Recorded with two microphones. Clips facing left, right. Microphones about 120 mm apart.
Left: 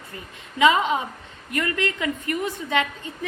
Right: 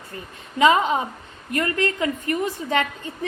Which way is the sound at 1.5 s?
30° right (ahead or behind).